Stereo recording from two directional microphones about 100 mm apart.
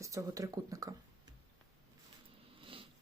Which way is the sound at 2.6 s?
65° right (ahead or behind).